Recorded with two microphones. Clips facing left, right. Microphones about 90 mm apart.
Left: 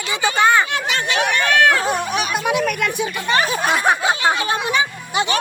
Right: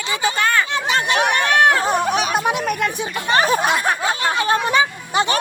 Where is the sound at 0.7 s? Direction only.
40° right (ahead or behind).